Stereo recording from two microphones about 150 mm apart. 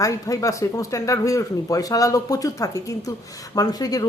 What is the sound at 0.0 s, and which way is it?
Speech, 20° left (ahead or behind).